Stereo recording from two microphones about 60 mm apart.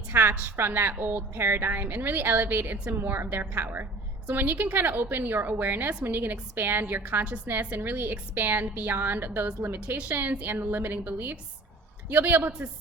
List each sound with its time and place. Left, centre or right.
0.1 s a woman's voice: right
6.6 s a woman's voice: right